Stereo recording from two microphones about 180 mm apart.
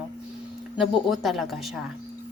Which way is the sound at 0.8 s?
Centre (ahead or behind).